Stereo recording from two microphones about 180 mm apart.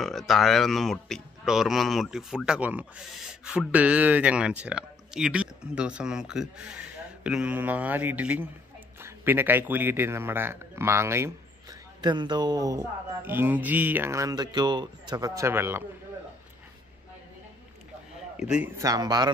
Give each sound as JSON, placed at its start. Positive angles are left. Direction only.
{"t": 0.0, "sound": "speech", "side_deg": 0}
{"t": 12.0, "sound": "speech", "side_deg": -25}
{"t": 18.3, "sound": "a man's voice", "side_deg": -5}
{"t": 18.8, "sound": "speech", "side_deg": -20}